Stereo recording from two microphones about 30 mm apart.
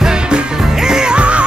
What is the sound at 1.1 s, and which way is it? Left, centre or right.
Music, right.